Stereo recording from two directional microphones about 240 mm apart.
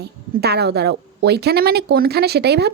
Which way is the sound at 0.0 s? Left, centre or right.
Right.